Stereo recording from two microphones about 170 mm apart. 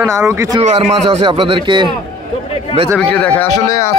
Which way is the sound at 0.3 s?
15° right (ahead or behind).